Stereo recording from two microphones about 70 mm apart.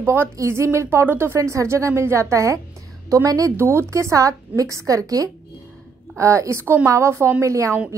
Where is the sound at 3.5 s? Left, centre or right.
Right.